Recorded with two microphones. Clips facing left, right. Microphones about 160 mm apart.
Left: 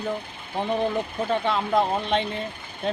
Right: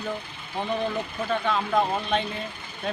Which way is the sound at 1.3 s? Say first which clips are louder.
Left 1 dB; 25° left (ahead or behind).